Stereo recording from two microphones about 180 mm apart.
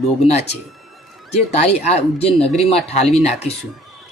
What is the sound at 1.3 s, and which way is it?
Speech, 35° left (ahead or behind).